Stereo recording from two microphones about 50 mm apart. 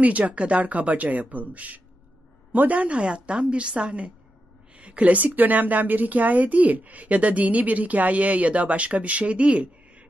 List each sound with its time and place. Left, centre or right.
0.0 s a woman's voice: right